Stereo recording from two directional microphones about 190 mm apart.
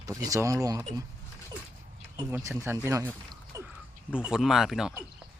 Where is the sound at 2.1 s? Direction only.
15° right (ahead or behind).